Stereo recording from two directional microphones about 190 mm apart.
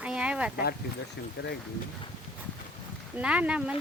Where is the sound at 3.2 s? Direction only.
5° right (ahead or behind).